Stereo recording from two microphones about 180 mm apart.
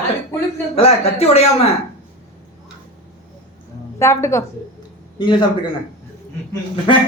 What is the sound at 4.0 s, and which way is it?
A man's voice, 15° left (ahead or behind).